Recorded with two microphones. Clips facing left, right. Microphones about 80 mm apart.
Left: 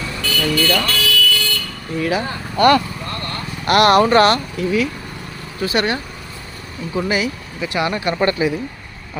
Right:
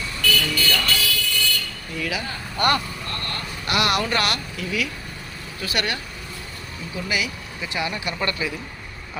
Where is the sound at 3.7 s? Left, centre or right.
Left.